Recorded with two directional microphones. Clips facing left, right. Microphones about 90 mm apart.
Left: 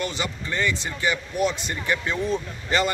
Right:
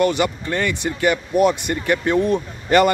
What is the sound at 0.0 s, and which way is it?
Speech, 55° right (ahead or behind).